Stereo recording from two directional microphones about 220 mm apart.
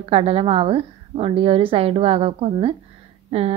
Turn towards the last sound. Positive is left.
turn(degrees=-30)  # may be behind; listen again after turning